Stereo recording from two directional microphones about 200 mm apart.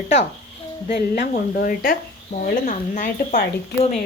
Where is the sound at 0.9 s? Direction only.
50° left (ahead or behind).